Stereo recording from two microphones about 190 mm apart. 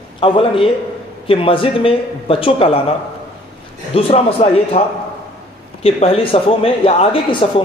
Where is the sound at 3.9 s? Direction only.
30° left (ahead or behind).